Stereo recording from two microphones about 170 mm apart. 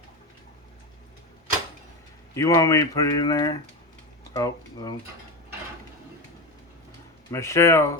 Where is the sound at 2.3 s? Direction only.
20° left (ahead or behind).